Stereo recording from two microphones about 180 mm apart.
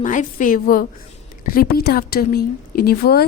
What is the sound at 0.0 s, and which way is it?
A woman's voice, 45° left (ahead or behind).